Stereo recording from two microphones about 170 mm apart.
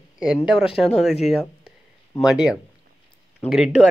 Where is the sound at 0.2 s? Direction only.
20° left (ahead or behind).